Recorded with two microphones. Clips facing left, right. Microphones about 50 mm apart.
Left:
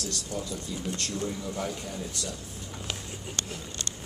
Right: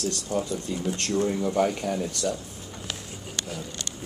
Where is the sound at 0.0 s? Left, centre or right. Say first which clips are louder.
Right 7 dB; right.